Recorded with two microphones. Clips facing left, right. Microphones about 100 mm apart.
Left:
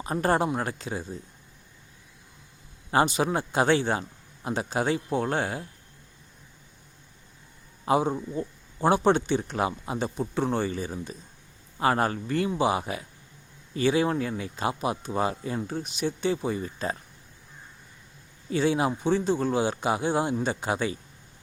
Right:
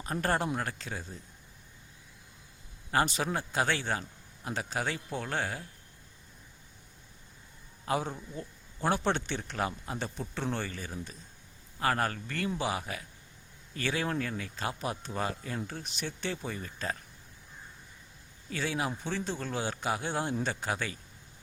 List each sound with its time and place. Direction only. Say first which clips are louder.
0.0 s speech: left 6 dB; 15° left (ahead or behind)
2.9 s speech: left 6 dB; 20° left (ahead or behind)
7.9 s speech: left 8 dB; 20° left (ahead or behind)
18.5 s speech: left 9 dB; 25° left (ahead or behind)